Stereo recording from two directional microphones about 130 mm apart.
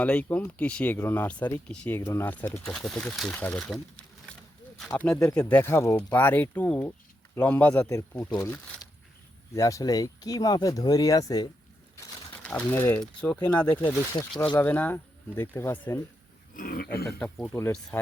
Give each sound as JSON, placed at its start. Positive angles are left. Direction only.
{"t": 0.0, "sound": "speech", "side_deg": 10}
{"t": 2.0, "sound": "speech", "side_deg": 20}
{"t": 5.1, "sound": "speech", "side_deg": 25}
{"t": 5.4, "sound": "speech", "side_deg": 15}
{"t": 7.7, "sound": "speech", "side_deg": 25}
{"t": 12.4, "sound": "speech", "side_deg": 10}
{"t": 14.1, "sound": "speech", "side_deg": 25}
{"t": 14.6, "sound": "speech", "side_deg": 15}
{"t": 17.1, "sound": "speech", "side_deg": 10}
{"t": 17.5, "sound": "speech", "side_deg": 20}